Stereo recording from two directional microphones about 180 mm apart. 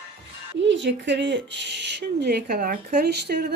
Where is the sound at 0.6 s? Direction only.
85° right; by 3.6 s 65° right (ahead or behind).